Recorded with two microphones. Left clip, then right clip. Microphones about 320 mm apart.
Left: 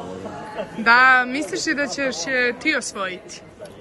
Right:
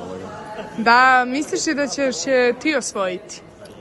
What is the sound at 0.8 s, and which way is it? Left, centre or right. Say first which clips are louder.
A man's voice: right 1 dB; centre.